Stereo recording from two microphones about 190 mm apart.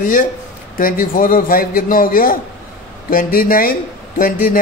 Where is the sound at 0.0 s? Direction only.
45° left (ahead or behind).